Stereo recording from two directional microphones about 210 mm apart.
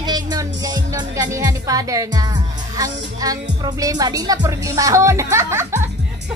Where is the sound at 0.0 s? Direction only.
20° right (ahead or behind).